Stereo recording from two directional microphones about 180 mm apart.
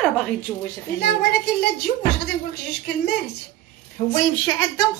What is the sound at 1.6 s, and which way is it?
Speech, 65° left (ahead or behind).